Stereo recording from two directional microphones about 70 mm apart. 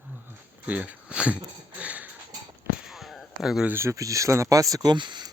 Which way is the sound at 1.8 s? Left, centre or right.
Right.